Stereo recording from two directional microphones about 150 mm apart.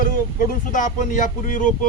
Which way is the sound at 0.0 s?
60° left (ahead or behind).